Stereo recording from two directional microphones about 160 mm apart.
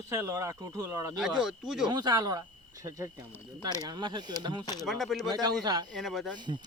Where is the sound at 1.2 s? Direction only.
5° right (ahead or behind).